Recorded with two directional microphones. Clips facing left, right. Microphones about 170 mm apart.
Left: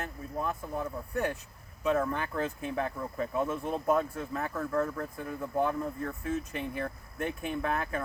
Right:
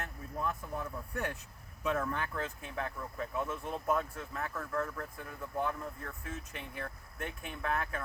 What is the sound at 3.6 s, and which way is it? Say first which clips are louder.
Speech: left 6 dB; 35° left (ahead or behind).